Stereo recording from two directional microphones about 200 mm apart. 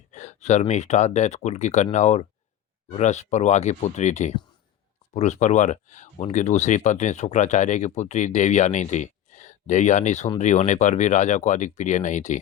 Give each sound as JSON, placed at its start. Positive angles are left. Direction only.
{"t": 0.1, "sound": "speech", "side_deg": 35}